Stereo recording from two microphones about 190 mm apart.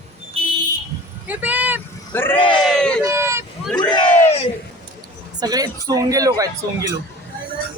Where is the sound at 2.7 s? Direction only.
5° left (ahead or behind).